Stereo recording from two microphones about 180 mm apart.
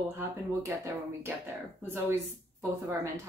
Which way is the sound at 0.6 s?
15° right (ahead or behind).